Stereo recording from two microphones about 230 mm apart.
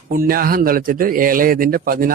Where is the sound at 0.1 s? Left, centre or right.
Right.